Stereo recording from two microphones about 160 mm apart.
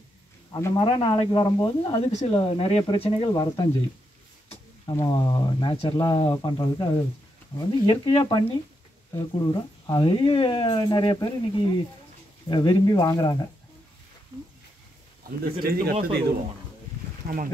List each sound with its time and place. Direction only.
0.5 s speech: 20° left (ahead or behind)
0.7 s speech: 30° left (ahead or behind)
4.8 s speech: 30° left (ahead or behind)
15.6 s speech: 70° right (ahead or behind)
17.2 s speech: 70° right (ahead or behind)